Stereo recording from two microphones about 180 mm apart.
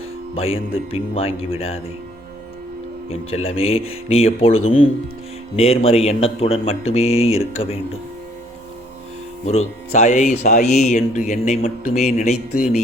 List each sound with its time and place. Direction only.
0.3 s a man's voice: 35° left (ahead or behind)
3.1 s a man's voice: 35° left (ahead or behind)
9.5 s a man's voice: 40° left (ahead or behind)